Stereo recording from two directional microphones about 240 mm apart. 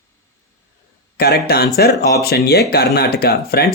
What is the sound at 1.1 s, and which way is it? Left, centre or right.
Speech, left.